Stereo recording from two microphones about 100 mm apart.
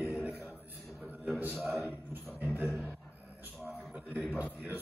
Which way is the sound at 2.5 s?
20° right (ahead or behind).